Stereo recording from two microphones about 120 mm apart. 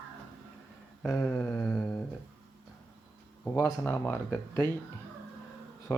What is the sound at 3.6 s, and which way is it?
Speech, 20° left (ahead or behind).